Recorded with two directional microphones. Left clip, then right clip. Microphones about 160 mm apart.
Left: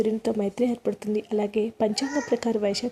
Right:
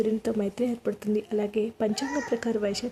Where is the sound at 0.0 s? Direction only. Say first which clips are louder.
Left 2 dB; 10° left (ahead or behind).